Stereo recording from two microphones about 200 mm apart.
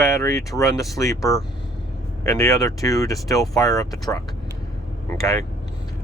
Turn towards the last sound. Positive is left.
turn(degrees=15)  # may be behind; listen again after turning